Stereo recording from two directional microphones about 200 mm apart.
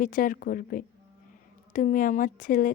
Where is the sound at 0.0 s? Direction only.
45° left (ahead or behind).